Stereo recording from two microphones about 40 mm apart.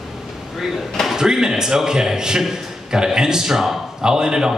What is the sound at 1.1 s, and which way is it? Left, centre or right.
A man's voice, centre.